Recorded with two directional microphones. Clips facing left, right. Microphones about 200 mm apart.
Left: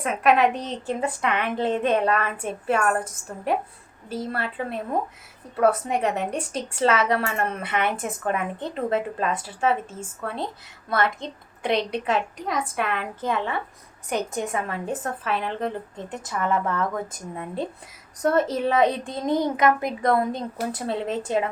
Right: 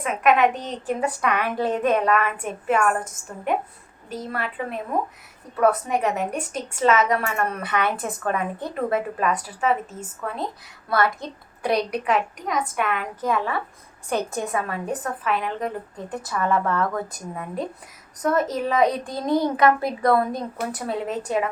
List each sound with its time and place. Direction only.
0.0 s a woman's voice: 35° left (ahead or behind)
4.1 s a woman's voice: 30° left (ahead or behind)
10.8 s a child's voice: 25° left (ahead or behind)